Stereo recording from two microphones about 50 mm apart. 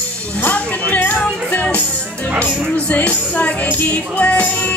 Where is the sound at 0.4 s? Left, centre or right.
Left.